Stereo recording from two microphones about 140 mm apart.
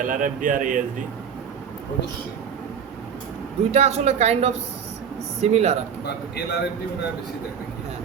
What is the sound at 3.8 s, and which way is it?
Speech, 50° right (ahead or behind).